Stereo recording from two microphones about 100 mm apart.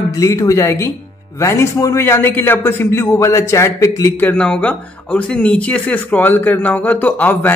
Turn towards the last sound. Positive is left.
turn(degrees=15)  # may be behind; listen again after turning